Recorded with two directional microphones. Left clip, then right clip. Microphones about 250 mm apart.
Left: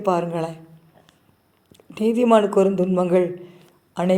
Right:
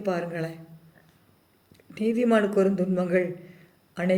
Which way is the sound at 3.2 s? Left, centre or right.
Centre.